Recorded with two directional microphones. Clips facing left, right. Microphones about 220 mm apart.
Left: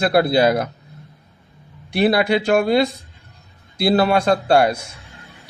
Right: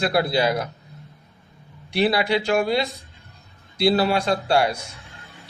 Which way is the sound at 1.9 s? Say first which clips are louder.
Left 4 dB; 50° left (ahead or behind).